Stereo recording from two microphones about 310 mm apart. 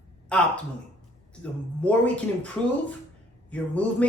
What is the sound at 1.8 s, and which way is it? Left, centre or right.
Speech, centre.